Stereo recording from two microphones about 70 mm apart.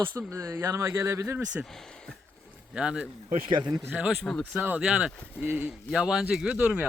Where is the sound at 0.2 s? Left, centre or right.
Right.